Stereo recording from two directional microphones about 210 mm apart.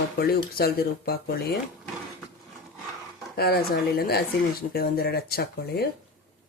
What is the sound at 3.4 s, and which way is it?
Speech, 45° left (ahead or behind).